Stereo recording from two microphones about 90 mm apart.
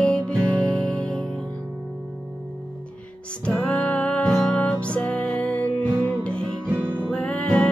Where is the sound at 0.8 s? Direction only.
10° left (ahead or behind).